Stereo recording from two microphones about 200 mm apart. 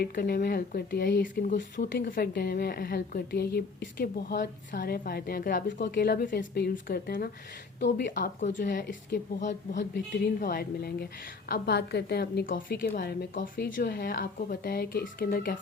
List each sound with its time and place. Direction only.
0.0 s a woman's voice: 50° left (ahead or behind)
9.7 s a woman's voice: 50° left (ahead or behind)